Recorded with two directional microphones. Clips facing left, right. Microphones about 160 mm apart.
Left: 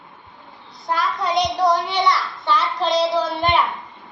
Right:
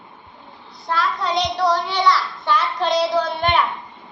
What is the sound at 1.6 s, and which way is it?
Speech, 20° left (ahead or behind).